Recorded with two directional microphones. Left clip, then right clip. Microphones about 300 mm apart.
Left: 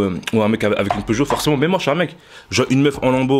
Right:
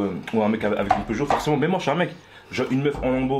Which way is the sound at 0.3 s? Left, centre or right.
Left.